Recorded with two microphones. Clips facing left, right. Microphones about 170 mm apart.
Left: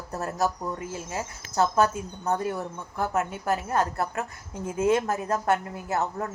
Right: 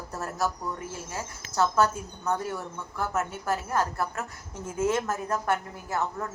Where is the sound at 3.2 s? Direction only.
15° left (ahead or behind).